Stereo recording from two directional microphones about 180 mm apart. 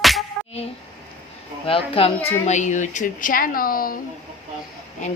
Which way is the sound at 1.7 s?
30° left (ahead or behind).